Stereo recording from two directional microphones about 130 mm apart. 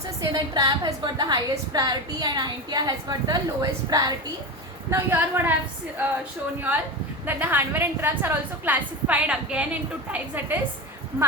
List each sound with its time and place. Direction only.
0.2 s a woman's voice: 30° right (ahead or behind)
4.9 s a woman's voice: 20° right (ahead or behind)
7.3 s a woman's voice: 15° right (ahead or behind)